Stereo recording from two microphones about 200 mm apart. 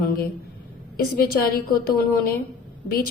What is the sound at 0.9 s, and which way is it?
A woman's voice, 50° left (ahead or behind).